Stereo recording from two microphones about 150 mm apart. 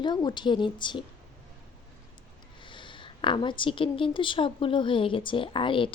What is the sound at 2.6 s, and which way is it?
A woman's voice, 30° left (ahead or behind).